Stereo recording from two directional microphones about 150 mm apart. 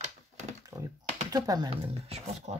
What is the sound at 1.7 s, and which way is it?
Speech, 45° right (ahead or behind).